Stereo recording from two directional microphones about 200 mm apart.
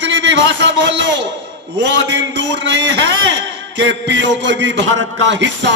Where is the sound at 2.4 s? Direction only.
60° right (ahead or behind).